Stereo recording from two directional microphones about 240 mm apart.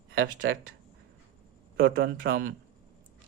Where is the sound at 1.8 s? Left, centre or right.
Right.